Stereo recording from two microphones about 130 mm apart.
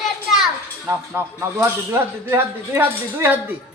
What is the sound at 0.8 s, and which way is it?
A man's voice, 20° right (ahead or behind).